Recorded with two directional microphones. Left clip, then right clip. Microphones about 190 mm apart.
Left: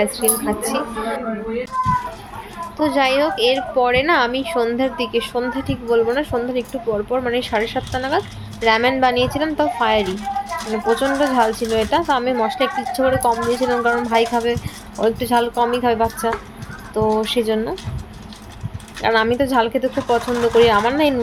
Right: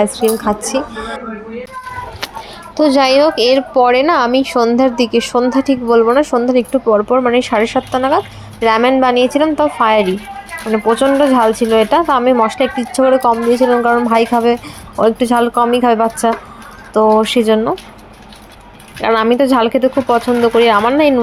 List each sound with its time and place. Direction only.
0.0 s speech: 25° right (ahead or behind)
2.7 s speech: 40° right (ahead or behind)
19.0 s speech: 25° right (ahead or behind)